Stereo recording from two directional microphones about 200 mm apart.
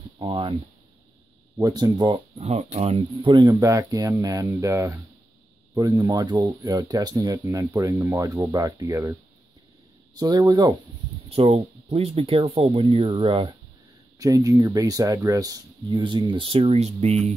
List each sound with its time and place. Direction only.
0.2 s speech: 25° right (ahead or behind)
1.6 s speech: 20° right (ahead or behind)
10.1 s speech: 20° right (ahead or behind)
11.2 s speech: 30° right (ahead or behind)